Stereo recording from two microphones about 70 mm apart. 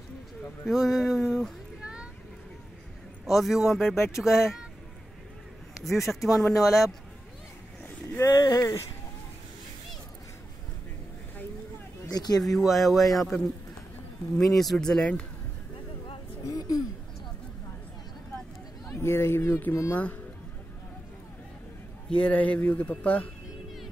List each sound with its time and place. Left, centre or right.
0.7 s speech: centre
1.8 s a sound: centre
3.3 s speech: centre
5.8 s speech: centre
8.3 s speech: left
8.5 s speech: left
12.1 s speech: left
12.4 s speech: centre
14.4 s speech: centre
16.4 s a sound: left
18.9 s speech: left
19.9 s speech: left
22.2 s speech: left